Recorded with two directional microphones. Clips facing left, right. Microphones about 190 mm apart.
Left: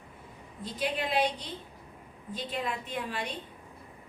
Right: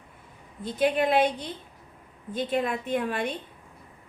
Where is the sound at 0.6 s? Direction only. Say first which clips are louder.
Right 9 dB; 55° right (ahead or behind).